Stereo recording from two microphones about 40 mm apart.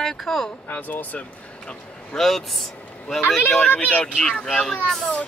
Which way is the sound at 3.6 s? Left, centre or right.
Left.